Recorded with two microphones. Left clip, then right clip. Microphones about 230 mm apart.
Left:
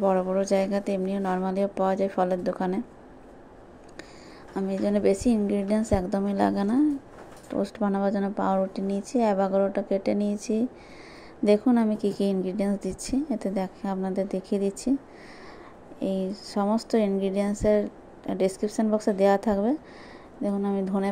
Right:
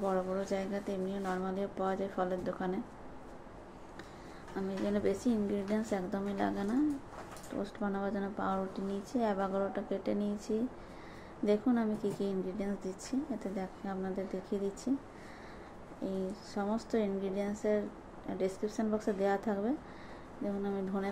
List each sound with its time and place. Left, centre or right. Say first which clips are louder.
0.0 s speech: left 10 dB; left
4.6 s speech: left 9 dB; left
16.0 s speech: left 9 dB; left